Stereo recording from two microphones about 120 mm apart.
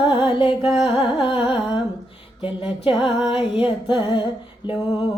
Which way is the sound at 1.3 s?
5° right (ahead or behind).